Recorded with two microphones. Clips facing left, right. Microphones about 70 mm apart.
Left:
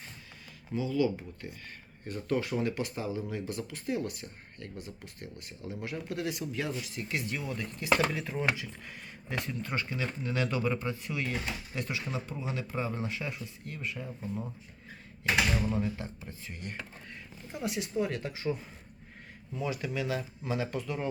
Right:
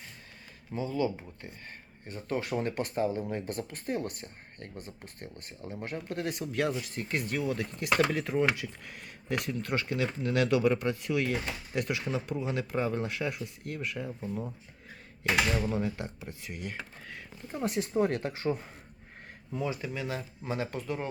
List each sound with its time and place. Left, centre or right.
0.7 s speech: right
2.4 s speech: right
15.7 s speech: right
17.5 s speech: right
19.6 s speech: right